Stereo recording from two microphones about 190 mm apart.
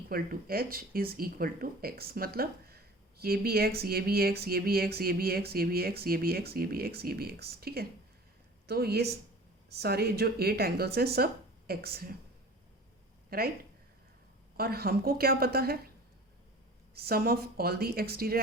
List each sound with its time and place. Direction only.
0.1 s speech: 50° right (ahead or behind)
13.3 s speech: 55° right (ahead or behind)
14.5 s speech: 55° right (ahead or behind)
16.9 s speech: 55° right (ahead or behind)